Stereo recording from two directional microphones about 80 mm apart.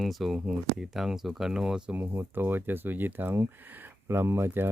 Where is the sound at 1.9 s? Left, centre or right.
Right.